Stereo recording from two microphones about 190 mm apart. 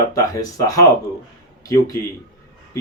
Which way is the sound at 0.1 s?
20° left (ahead or behind).